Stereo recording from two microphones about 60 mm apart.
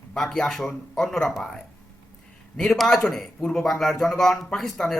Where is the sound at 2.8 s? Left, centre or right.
Centre.